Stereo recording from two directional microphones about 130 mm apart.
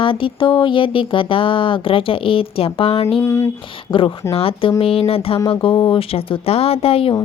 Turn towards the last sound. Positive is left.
turn(degrees=45)  # may be behind; listen again after turning